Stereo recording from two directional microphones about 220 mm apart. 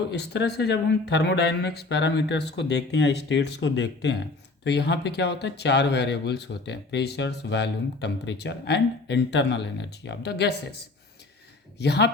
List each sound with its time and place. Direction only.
0.1 s speech: 50° left (ahead or behind)